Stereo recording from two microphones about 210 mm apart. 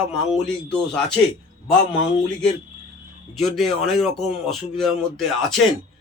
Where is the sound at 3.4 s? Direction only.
Centre (ahead or behind).